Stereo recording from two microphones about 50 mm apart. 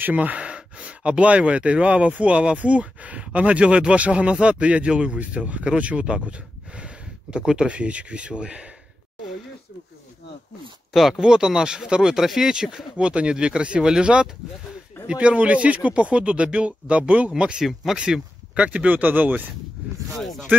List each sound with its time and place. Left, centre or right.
0.0 s speech: right
10.9 s speech: centre
11.1 s speech: centre
12.2 s speech: centre; by 18.9 s right
18.9 s speech: right
20.2 s speech: centre